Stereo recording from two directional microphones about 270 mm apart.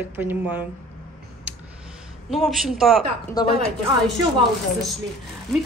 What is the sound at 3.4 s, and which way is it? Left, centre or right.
Speech, centre.